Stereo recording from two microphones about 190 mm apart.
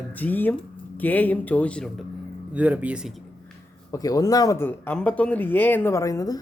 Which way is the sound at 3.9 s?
20° left (ahead or behind).